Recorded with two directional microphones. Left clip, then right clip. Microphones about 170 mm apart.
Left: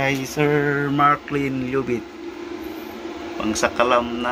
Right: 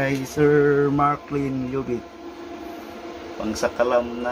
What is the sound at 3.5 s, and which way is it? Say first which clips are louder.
Speech: left 2 dB; 5° right (ahead or behind).